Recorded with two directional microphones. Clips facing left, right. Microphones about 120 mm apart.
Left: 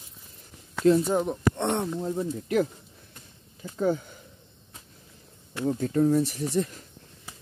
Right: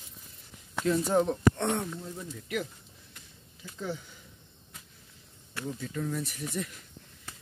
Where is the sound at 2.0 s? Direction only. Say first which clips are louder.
Left 12 dB; 40° left (ahead or behind).